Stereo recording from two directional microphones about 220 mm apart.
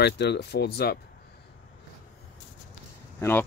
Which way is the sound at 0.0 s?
50° left (ahead or behind).